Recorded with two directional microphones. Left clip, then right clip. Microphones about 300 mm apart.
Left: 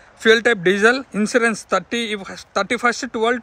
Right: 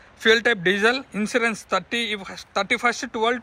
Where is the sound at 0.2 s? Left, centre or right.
Centre.